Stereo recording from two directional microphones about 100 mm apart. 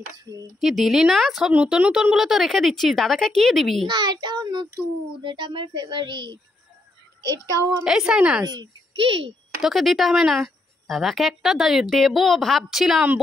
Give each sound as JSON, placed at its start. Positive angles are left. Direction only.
{"t": 0.6, "sound": "a woman's voice", "side_deg": 0}
{"t": 1.5, "sound": "a woman's voice", "side_deg": -10}
{"t": 3.9, "sound": "a woman's voice", "side_deg": -45}
{"t": 7.8, "sound": "a woman's voice", "side_deg": -5}
{"t": 8.9, "sound": "speech", "side_deg": -65}
{"t": 9.6, "sound": "a woman's voice", "side_deg": 0}